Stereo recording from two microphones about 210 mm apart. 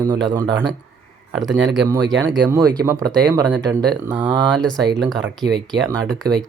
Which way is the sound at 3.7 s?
15° right (ahead or behind).